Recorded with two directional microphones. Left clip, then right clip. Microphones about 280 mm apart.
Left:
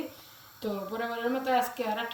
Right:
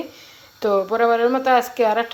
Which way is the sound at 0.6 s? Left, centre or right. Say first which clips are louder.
Right 16 dB; right.